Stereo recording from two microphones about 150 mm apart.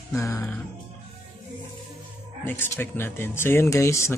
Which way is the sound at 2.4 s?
15° left (ahead or behind).